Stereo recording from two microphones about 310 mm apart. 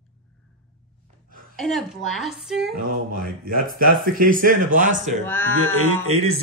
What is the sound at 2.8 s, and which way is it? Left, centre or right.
Speech, right.